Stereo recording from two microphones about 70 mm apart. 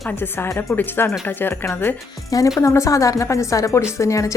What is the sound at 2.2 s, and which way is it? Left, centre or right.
Speech, left.